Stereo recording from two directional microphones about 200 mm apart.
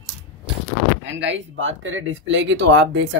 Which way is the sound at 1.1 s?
70° right (ahead or behind).